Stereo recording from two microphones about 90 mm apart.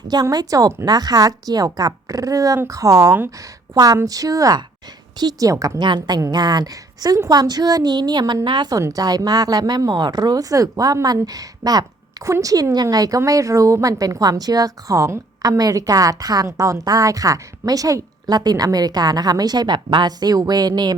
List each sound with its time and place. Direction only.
0.1 s speech: 45° right (ahead or behind)
5.8 s a woman's voice: 55° right (ahead or behind)
8.7 s speech: 40° right (ahead or behind)